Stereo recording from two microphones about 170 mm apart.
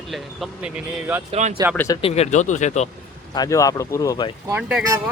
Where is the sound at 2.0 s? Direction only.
35° left (ahead or behind).